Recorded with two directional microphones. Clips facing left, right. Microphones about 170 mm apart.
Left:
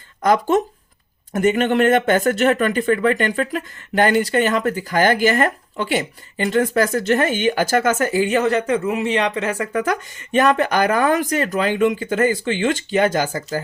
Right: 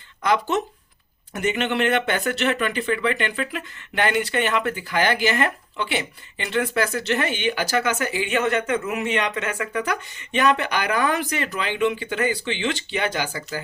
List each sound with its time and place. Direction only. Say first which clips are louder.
0.2 s speech: left 5 dB; 45° left (ahead or behind)